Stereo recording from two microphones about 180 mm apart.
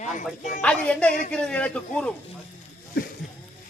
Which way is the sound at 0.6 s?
5° left (ahead or behind).